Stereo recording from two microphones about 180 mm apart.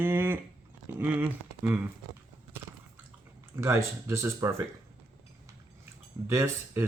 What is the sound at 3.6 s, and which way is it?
Speech, 15° right (ahead or behind).